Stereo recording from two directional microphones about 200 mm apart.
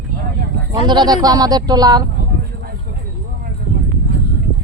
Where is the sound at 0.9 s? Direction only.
20° right (ahead or behind).